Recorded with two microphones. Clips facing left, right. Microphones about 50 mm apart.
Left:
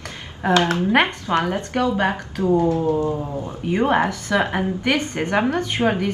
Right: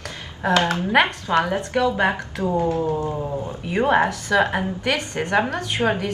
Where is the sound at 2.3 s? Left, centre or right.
Right.